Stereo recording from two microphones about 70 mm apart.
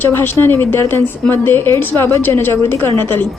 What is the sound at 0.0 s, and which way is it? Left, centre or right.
A woman's voice, left.